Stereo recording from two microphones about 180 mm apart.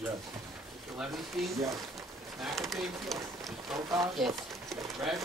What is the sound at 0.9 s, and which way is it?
Speech, centre (ahead or behind).